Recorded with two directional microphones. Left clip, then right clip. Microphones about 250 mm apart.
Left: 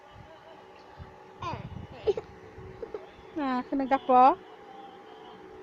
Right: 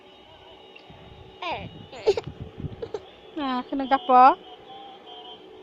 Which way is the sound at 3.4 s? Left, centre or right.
Centre.